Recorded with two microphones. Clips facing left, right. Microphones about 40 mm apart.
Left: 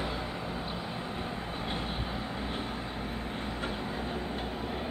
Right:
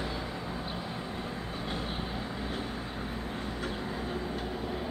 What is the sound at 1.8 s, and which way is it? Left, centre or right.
Vehicle, centre.